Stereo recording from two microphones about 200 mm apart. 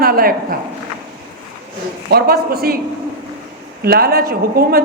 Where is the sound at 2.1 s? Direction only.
50° right (ahead or behind).